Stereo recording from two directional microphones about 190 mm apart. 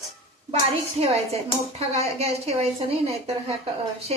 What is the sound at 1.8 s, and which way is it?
Speech, 35° right (ahead or behind).